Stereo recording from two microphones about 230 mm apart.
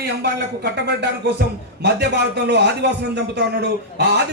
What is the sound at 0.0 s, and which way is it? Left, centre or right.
A man's voice, right.